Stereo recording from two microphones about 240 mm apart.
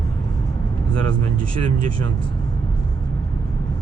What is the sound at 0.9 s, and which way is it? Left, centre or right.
Speech, right.